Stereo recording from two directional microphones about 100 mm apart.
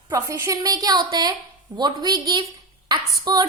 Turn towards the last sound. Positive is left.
turn(degrees=-40)  # may be behind; listen again after turning